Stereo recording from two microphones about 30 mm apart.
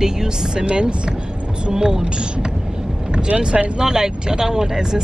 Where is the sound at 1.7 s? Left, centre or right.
Right.